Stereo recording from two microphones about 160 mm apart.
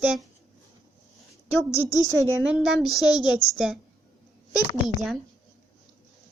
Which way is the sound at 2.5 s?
Centre (ahead or behind).